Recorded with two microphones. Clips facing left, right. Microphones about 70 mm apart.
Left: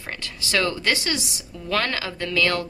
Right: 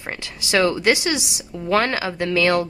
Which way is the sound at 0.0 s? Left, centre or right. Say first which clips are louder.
Right 2 dB; centre.